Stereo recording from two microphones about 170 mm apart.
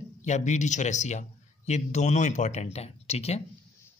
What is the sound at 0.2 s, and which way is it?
A man's voice, 45° left (ahead or behind).